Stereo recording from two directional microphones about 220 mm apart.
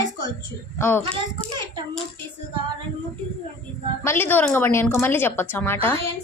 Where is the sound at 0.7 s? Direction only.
10° left (ahead or behind).